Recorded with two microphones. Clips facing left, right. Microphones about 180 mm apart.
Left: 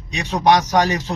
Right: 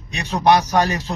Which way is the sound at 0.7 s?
15° left (ahead or behind).